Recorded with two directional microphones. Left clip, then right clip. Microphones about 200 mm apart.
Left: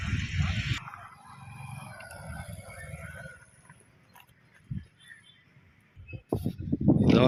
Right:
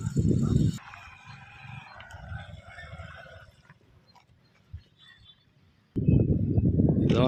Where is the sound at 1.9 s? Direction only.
50° left (ahead or behind).